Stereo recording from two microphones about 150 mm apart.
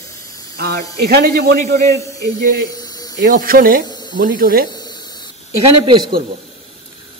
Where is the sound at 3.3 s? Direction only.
75° right (ahead or behind).